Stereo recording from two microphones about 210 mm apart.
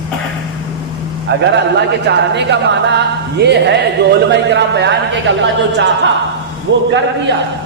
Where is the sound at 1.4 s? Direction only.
55° right (ahead or behind).